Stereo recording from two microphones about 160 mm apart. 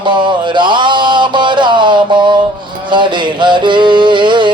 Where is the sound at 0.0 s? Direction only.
30° right (ahead or behind).